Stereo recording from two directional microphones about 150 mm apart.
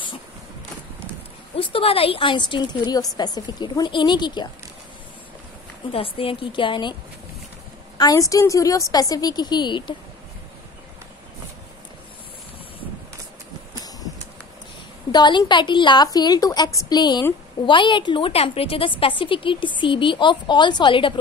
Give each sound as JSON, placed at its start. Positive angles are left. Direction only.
{"t": 1.6, "sound": "a woman's voice", "side_deg": 40}
{"t": 5.9, "sound": "a woman's voice", "side_deg": 40}
{"t": 8.0, "sound": "a woman's voice", "side_deg": 25}
{"t": 15.0, "sound": "a woman's voice", "side_deg": 30}